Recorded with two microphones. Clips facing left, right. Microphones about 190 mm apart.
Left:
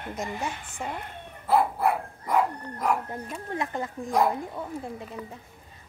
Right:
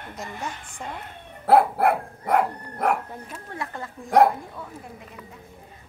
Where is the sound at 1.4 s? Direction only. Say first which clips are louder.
Right 5 dB; 70° right (ahead or behind).